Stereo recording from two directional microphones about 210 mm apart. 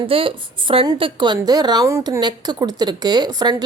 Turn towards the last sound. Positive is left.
turn(degrees=-20)  # may be behind; listen again after turning